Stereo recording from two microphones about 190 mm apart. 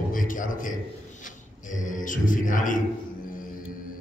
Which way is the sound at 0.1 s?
45° left (ahead or behind).